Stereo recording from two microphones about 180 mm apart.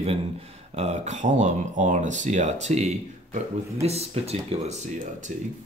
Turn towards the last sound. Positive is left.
turn(degrees=-35)  # may be behind; listen again after turning